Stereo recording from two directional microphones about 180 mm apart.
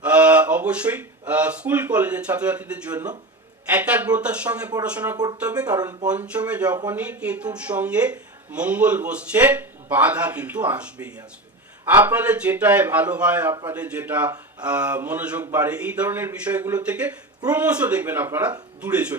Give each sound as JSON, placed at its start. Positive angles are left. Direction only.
{"t": 0.0, "sound": "speech", "side_deg": -5}
{"t": 5.1, "sound": "speech", "side_deg": -20}
{"t": 5.4, "sound": "speech", "side_deg": -5}
{"t": 5.7, "sound": "speech", "side_deg": -20}
{"t": 6.1, "sound": "speech", "side_deg": -5}